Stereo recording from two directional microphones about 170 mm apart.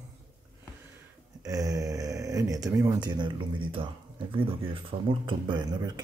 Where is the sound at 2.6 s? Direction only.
20° right (ahead or behind).